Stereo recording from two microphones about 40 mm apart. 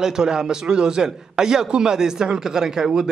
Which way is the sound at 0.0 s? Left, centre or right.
Centre.